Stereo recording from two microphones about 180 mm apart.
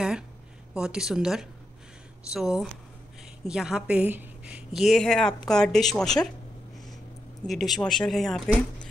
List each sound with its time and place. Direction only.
0.7 s a woman's voice: 5° right (ahead or behind)
7.4 s a woman's voice: centre (ahead or behind)